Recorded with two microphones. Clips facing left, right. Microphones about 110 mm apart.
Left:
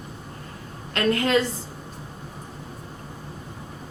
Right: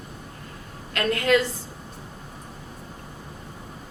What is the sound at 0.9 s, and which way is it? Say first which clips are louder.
Speech: even; 30° left (ahead or behind).